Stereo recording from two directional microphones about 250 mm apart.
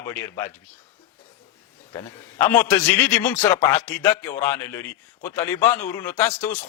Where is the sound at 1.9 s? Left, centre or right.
Centre.